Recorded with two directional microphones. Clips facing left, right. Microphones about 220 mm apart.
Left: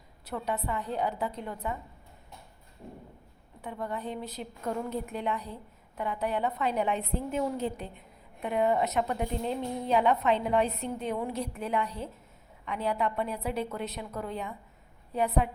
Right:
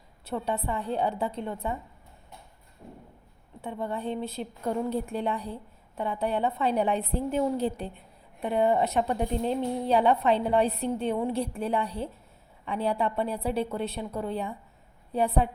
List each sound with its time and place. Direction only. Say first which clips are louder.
0.3 s a woman's voice: right 3 dB; 30° right (ahead or behind)
3.6 s a woman's voice: right 3 dB; 25° right (ahead or behind)